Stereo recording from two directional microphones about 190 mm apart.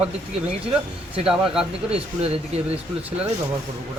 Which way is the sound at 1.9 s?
30° right (ahead or behind).